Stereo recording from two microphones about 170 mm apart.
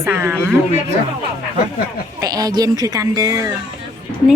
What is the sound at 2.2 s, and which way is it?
A woman's voice, 20° right (ahead or behind).